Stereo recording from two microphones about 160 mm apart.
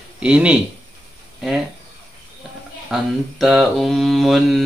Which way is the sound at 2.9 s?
Centre (ahead or behind).